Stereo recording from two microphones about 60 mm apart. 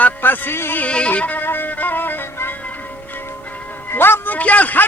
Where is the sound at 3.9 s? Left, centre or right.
Left.